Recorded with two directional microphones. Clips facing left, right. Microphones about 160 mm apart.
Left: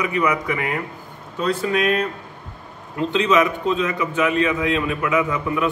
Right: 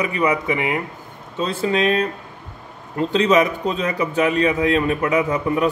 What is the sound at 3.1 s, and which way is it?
Speech, 35° right (ahead or behind).